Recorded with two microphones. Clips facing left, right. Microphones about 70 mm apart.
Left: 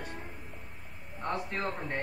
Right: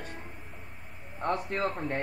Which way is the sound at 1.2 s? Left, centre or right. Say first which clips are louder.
Right 4 dB; right.